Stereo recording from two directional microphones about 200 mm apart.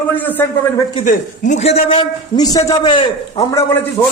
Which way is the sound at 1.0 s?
40° left (ahead or behind).